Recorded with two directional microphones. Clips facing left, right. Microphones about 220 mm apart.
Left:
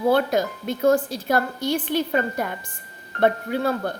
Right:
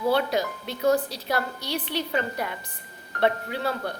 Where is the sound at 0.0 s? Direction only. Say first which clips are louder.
Left 4 dB; 50° left (ahead or behind).